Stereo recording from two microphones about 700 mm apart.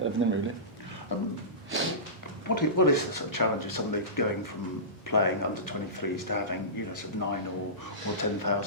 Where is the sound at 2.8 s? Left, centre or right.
Left.